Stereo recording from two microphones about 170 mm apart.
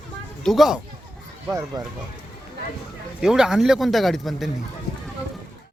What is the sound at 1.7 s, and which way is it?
Speech, 25° right (ahead or behind).